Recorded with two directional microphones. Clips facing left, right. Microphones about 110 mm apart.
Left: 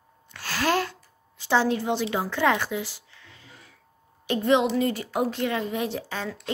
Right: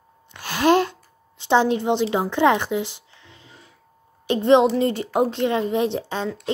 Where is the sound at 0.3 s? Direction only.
20° right (ahead or behind).